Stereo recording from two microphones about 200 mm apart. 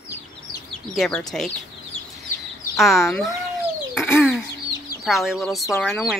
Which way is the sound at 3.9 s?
5° right (ahead or behind).